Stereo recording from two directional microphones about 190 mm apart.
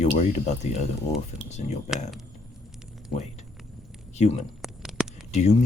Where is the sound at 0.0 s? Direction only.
35° left (ahead or behind).